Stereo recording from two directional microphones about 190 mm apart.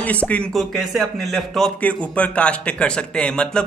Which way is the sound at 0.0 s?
5° left (ahead or behind).